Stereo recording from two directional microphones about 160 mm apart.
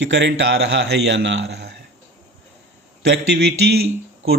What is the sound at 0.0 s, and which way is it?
A man's voice, 90° right.